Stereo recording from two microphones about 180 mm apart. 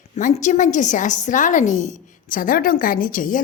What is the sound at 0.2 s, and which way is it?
Speech, 45° left (ahead or behind).